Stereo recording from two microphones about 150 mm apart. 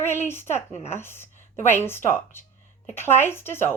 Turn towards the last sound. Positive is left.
turn(degrees=15)  # may be behind; listen again after turning